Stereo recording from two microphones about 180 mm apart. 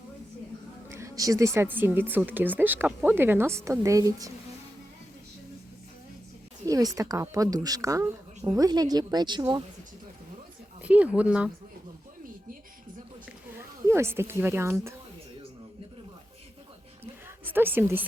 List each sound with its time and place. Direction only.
0.9 s speech: 15° right (ahead or behind)
6.7 s speech: 20° right (ahead or behind)
10.8 s speech: 10° right (ahead or behind)
13.8 s speech: 15° right (ahead or behind)
17.4 s a woman's voice: 10° right (ahead or behind)